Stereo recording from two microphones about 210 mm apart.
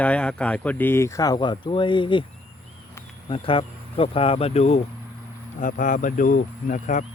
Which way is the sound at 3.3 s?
25° left (ahead or behind).